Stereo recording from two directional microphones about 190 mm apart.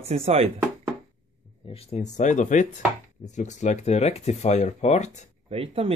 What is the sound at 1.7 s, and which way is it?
Speech, 35° left (ahead or behind).